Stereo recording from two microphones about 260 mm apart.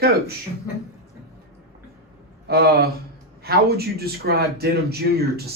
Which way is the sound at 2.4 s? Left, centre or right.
Right.